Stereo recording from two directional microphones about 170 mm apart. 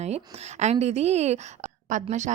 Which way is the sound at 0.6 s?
40° right (ahead or behind).